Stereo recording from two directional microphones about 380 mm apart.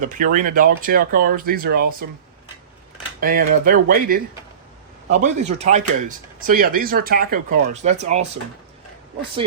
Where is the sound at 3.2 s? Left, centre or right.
Right.